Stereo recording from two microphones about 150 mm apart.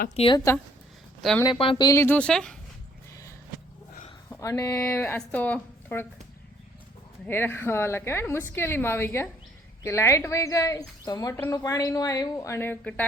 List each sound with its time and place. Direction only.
0.2 s speech: 45° left (ahead or behind)
1.2 s speech: centre (ahead or behind)
1.5 s a woman's voice: 35° left (ahead or behind)
2.0 s speech: 10° left (ahead or behind)
4.3 s speech: 20° left (ahead or behind)
7.3 s a woman's voice: 15° left (ahead or behind)